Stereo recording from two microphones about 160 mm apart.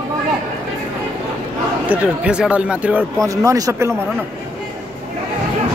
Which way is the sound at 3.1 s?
20° right (ahead or behind).